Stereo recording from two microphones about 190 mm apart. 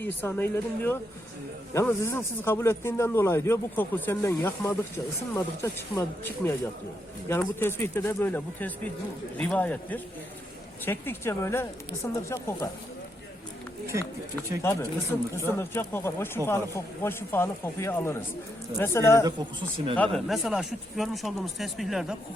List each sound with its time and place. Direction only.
0.0 s speech: 10° left (ahead or behind)
14.6 s speech: 15° left (ahead or behind)
19.2 s speech: 25° right (ahead or behind)
20.0 s speech: centre (ahead or behind)